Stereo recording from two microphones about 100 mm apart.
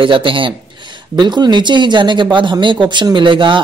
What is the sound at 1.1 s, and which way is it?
Speech, 45° right (ahead or behind).